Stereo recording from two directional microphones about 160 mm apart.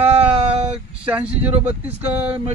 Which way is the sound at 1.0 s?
10° right (ahead or behind).